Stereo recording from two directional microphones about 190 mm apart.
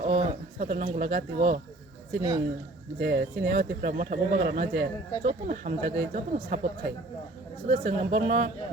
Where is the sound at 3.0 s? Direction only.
50° right (ahead or behind).